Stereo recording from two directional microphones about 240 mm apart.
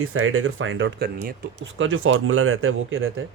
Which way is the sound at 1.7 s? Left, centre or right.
Right.